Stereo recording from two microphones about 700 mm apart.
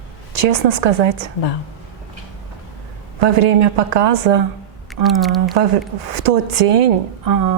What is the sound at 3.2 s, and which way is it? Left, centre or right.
A woman's voice, right.